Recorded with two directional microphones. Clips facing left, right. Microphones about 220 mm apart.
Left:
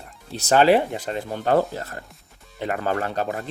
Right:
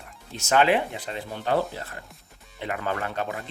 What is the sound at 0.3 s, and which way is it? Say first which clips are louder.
Speech: left 5 dB; 35° left (ahead or behind).